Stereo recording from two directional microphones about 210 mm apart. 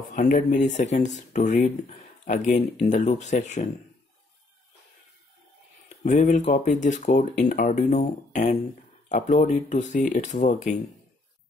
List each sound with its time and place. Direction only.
0.1 s speech: 35° left (ahead or behind)
6.0 s speech: 35° left (ahead or behind)